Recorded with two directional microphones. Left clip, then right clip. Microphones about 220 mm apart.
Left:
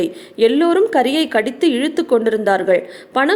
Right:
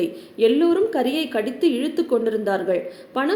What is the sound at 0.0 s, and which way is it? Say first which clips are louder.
A woman's voice: left 4 dB; 30° left (ahead or behind).